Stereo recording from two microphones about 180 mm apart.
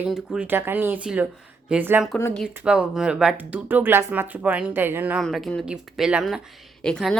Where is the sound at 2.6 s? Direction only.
5° right (ahead or behind).